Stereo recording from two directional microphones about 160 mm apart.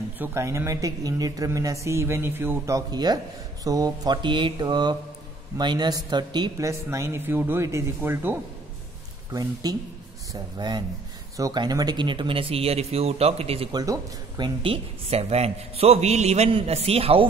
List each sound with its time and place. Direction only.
0.2 s speech: 15° right (ahead or behind)
6.7 s speech: 15° right (ahead or behind)
9.3 s speech: 25° right (ahead or behind); by 13.7 s 40° right (ahead or behind)
13.7 s speech: 25° right (ahead or behind)